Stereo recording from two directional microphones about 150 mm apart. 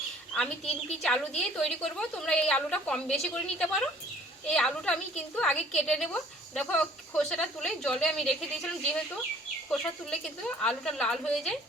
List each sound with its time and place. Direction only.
1.0 s a woman's voice: 5° left (ahead or behind)
9.6 s a woman's voice: 5° left (ahead or behind)